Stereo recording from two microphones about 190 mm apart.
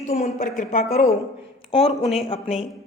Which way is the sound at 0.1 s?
35° left (ahead or behind).